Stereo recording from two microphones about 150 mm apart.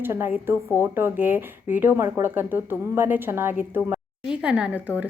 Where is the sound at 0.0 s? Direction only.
15° right (ahead or behind).